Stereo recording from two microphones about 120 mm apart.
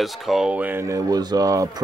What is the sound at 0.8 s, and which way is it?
Speech, 30° right (ahead or behind).